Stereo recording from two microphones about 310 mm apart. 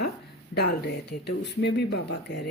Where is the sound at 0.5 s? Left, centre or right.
Left.